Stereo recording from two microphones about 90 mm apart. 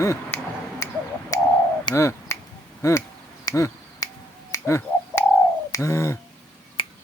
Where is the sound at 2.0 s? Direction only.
35° left (ahead or behind).